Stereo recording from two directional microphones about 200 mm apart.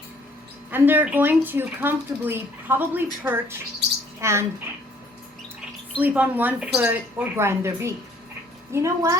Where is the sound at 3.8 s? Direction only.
55° right (ahead or behind).